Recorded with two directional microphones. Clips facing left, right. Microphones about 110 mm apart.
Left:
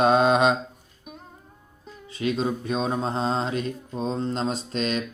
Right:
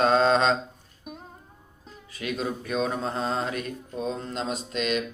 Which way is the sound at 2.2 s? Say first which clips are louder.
Left 5 dB; 25° left (ahead or behind).